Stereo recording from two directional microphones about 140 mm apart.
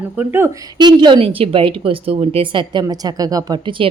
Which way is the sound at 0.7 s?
30° right (ahead or behind).